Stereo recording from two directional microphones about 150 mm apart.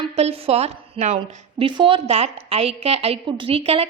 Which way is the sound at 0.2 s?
40° right (ahead or behind).